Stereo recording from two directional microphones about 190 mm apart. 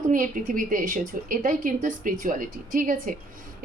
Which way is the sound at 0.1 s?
45° right (ahead or behind).